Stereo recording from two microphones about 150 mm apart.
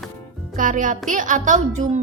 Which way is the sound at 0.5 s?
60° right (ahead or behind).